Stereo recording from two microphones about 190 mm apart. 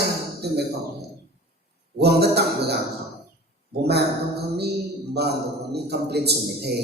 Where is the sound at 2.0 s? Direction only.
60° right (ahead or behind).